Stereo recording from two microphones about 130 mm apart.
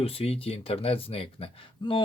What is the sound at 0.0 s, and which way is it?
Speech, 50° left (ahead or behind).